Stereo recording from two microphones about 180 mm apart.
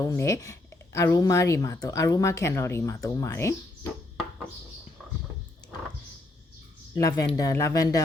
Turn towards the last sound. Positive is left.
turn(degrees=20)  # may be behind; listen again after turning